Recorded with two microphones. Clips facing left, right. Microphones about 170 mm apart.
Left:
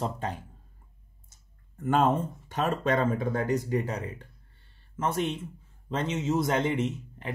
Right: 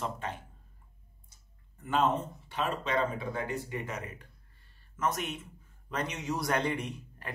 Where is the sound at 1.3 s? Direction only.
45° left (ahead or behind).